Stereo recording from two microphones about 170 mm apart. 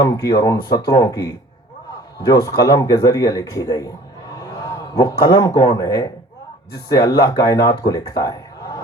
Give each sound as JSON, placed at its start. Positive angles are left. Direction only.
{"t": 0.0, "sound": "speech", "side_deg": 20}
{"t": 4.9, "sound": "speech", "side_deg": 20}